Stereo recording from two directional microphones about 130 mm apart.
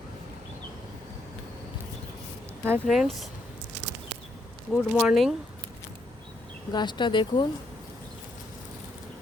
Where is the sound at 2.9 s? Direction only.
Centre (ahead or behind).